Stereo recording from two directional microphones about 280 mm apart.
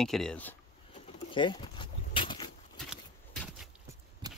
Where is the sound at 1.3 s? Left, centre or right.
Centre.